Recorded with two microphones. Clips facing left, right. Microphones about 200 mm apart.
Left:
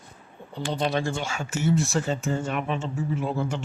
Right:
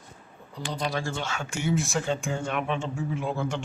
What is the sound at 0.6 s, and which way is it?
A man's voice, 25° left (ahead or behind).